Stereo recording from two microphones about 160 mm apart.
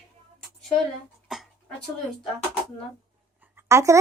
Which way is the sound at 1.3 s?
Centre (ahead or behind).